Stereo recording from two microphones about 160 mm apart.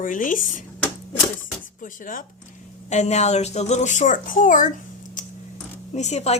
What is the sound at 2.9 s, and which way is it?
A woman's voice, 45° left (ahead or behind).